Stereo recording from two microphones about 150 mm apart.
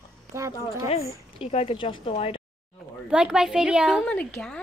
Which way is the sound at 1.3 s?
40° left (ahead or behind).